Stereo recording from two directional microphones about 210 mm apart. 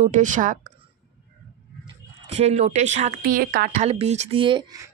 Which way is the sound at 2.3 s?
30° right (ahead or behind).